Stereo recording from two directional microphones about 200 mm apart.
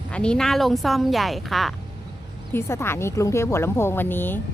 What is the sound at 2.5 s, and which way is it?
A woman's voice, 10° left (ahead or behind).